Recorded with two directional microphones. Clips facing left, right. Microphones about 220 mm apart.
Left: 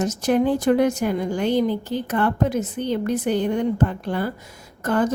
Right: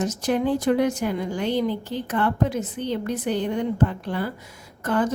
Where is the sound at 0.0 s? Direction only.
50° left (ahead or behind).